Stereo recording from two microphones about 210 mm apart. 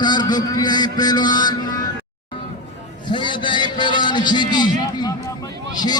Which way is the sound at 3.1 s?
20° left (ahead or behind).